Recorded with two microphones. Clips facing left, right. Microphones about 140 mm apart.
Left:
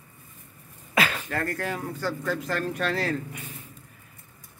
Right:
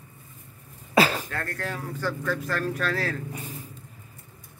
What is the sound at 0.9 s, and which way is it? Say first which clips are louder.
Throat clearing: right 5 dB; 35° right (ahead or behind).